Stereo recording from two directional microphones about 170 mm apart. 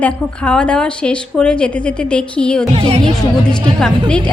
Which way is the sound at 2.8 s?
35° right (ahead or behind).